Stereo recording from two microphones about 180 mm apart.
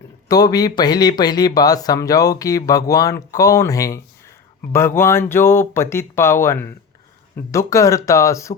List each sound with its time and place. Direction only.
0.3 s speech: 20° left (ahead or behind)